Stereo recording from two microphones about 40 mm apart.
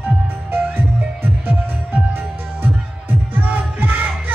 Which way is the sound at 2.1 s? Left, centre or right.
Right.